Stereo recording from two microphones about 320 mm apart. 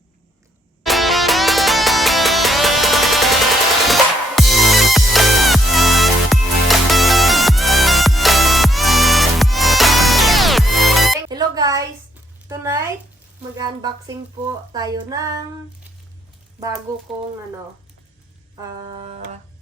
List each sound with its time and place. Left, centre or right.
0.9 s music: centre
11.3 s music: centre
12.5 s a sound: centre
13.6 s music: centre
14.7 s female singing: centre
18.9 s music: centre